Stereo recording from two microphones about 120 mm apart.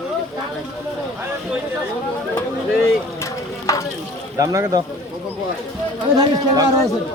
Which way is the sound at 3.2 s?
25° left (ahead or behind).